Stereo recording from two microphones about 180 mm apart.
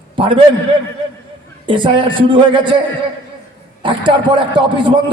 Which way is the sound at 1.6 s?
25° right (ahead or behind).